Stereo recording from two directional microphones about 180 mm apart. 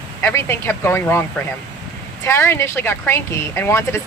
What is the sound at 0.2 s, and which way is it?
Speech, 15° left (ahead or behind).